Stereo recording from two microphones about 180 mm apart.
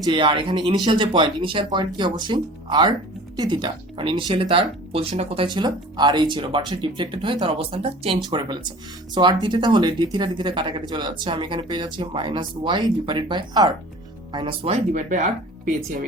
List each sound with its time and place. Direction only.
0.0 s speech: 25° right (ahead or behind); by 16.0 s 45° right (ahead or behind)